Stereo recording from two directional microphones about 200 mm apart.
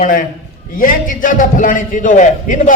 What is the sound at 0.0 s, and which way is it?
A man's voice, 45° left (ahead or behind).